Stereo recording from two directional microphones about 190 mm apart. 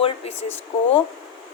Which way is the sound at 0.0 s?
30° left (ahead or behind).